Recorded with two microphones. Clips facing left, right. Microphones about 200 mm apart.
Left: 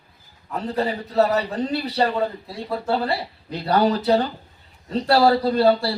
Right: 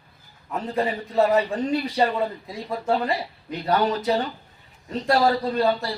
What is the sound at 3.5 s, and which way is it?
A man's voice, 35° left (ahead or behind).